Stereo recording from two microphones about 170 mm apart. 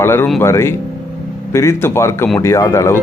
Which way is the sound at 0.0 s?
15° left (ahead or behind).